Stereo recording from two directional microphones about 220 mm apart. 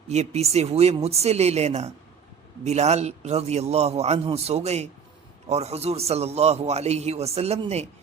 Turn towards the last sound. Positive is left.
turn(degrees=-30)  # may be behind; listen again after turning